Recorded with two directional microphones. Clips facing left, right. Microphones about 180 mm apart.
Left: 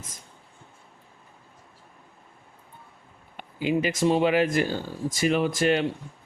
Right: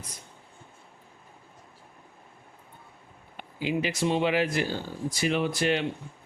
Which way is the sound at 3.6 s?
50° left (ahead or behind).